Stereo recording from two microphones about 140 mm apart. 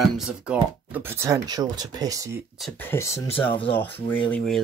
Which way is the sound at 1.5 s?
30° right (ahead or behind).